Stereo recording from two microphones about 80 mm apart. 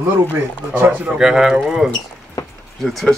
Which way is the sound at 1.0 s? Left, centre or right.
Centre.